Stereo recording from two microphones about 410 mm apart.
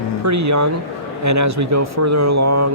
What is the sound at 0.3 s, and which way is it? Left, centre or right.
Speech, right.